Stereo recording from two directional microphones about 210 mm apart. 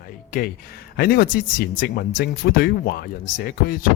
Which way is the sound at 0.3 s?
45° left (ahead or behind).